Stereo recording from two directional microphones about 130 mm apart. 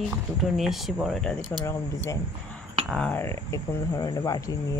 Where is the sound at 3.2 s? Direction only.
20° left (ahead or behind).